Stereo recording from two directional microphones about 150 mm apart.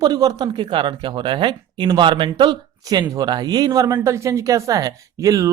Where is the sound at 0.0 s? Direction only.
25° right (ahead or behind).